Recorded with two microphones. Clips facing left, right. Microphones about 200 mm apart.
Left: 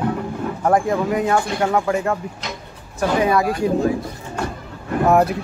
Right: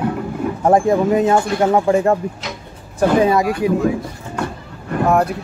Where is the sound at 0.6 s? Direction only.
25° right (ahead or behind).